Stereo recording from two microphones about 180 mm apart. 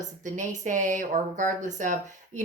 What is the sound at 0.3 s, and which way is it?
Speech, 45° right (ahead or behind).